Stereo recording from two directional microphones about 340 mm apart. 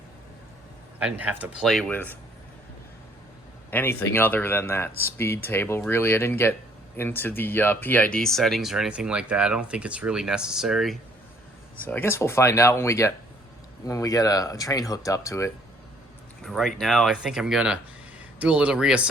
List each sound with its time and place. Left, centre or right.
0.9 s speech: centre
3.7 s speech: centre